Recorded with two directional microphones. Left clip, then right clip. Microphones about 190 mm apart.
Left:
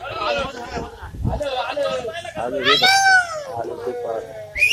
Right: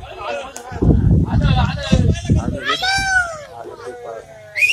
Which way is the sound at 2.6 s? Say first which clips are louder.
Left 4 dB; 55° right (ahead or behind).